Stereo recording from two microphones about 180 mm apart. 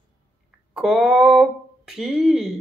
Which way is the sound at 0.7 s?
Centre (ahead or behind).